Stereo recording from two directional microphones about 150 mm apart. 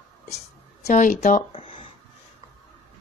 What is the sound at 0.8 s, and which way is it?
Speech, 60° left (ahead or behind).